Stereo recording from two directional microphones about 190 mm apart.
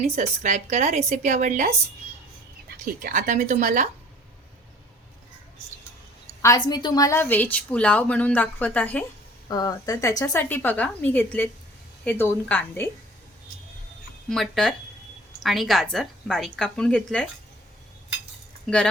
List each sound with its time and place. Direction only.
0.0 s a woman's voice: 40° right (ahead or behind)
6.4 s a woman's voice: 20° left (ahead or behind)
9.5 s a woman's voice: 20° left (ahead or behind)
14.3 s a woman's voice: centre (ahead or behind)